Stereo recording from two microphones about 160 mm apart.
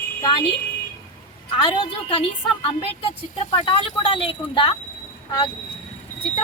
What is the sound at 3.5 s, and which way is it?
A woman's voice, 30° left (ahead or behind).